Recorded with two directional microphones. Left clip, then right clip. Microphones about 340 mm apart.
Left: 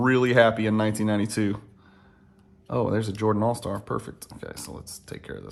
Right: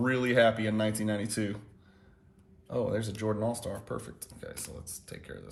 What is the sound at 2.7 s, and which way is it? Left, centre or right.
Speech, left.